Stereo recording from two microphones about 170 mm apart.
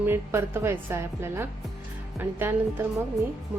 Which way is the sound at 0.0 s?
15° right (ahead or behind).